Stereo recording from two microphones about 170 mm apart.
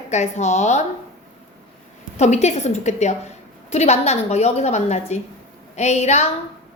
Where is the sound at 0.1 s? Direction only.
40° left (ahead or behind).